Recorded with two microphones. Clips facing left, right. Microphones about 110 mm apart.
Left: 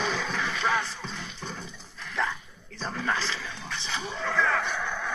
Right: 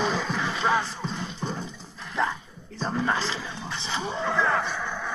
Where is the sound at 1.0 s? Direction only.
35° right (ahead or behind).